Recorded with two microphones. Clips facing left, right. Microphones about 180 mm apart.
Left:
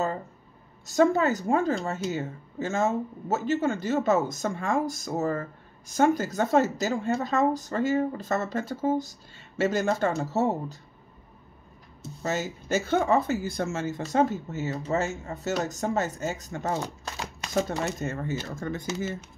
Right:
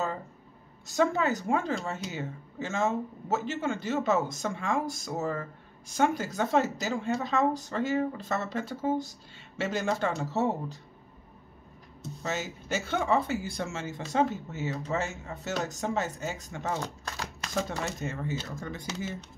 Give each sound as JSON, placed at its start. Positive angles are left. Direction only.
{"t": 0.8, "sound": "speech", "side_deg": 40}
{"t": 12.2, "sound": "speech", "side_deg": 40}
{"t": 16.8, "sound": "a sound", "side_deg": 10}
{"t": 17.8, "sound": "speech", "side_deg": 45}